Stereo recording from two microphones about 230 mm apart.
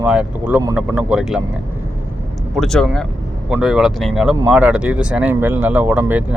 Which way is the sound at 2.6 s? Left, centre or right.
Centre.